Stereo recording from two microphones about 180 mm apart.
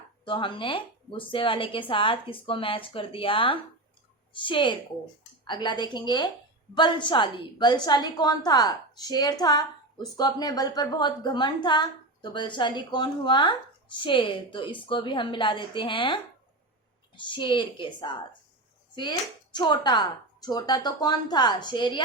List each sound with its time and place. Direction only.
0.3 s a woman's voice: 25° left (ahead or behind)